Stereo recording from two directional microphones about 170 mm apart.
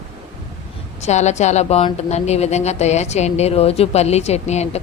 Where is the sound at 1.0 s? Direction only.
40° left (ahead or behind).